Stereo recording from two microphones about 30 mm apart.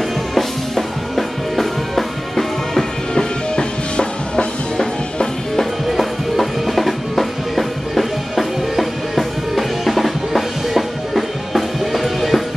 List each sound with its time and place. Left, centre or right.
0.3 s music: centre
3.9 s music: left
5.9 s music: centre